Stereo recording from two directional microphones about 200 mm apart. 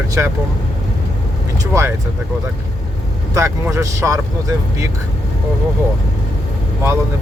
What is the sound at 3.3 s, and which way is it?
Speech, 15° right (ahead or behind).